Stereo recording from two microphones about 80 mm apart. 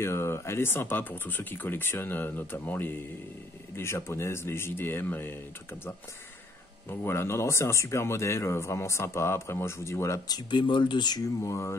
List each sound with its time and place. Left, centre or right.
0.0 s speech: left
6.9 s speech: left
10.3 s speech: left
11.2 s speech: left